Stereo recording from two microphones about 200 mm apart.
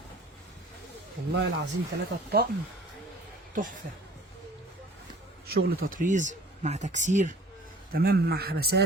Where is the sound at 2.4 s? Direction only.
50° right (ahead or behind).